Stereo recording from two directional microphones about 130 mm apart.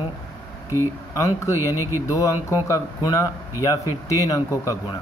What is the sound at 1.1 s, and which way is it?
Speech, 25° left (ahead or behind).